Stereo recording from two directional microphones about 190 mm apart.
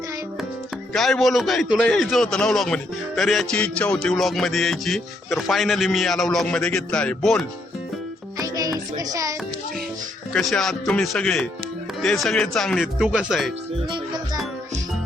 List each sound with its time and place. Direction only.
0.9 s speech: centre (ahead or behind)
8.4 s music: 20° right (ahead or behind)
10.3 s speech: centre (ahead or behind)